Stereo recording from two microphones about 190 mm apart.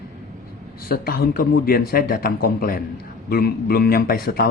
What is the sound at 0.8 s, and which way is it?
A man's voice, 55° left (ahead or behind).